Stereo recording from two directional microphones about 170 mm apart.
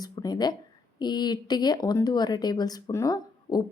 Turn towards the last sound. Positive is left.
turn(degrees=20)  # may be behind; listen again after turning